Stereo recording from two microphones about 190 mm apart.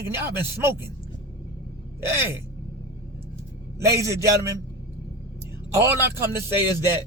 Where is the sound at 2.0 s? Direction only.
15° right (ahead or behind).